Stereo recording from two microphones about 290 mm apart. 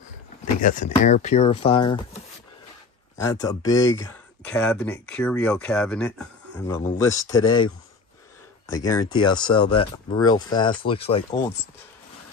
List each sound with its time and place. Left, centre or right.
0.6 s speech: left
8.7 s speech: centre